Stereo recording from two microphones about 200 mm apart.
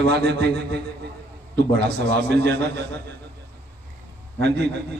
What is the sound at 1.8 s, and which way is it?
Speech, 55° right (ahead or behind).